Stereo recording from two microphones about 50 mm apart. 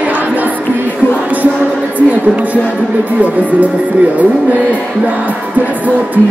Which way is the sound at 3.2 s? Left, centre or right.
Right.